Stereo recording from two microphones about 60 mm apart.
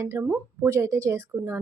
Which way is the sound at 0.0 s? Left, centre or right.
Right.